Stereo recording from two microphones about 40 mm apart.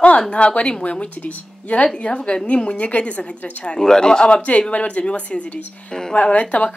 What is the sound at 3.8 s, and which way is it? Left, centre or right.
A woman's voice, centre.